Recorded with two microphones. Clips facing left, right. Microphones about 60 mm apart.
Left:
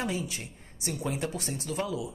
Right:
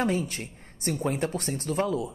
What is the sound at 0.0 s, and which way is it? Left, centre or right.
Speech, right.